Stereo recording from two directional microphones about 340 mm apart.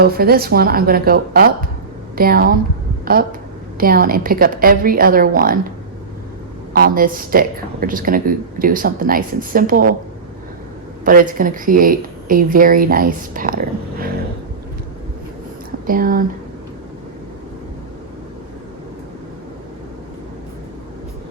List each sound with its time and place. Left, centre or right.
0.0 s speech: right
6.7 s speech: right
11.0 s speech: right
15.9 s speech: right